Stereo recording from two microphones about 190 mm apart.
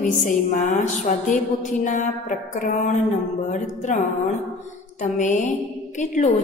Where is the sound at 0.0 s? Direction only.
45° left (ahead or behind).